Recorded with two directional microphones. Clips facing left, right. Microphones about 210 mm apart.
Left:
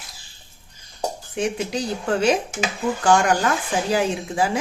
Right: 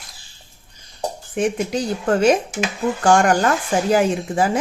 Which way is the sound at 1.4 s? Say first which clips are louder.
Right 4 dB; 50° right (ahead or behind).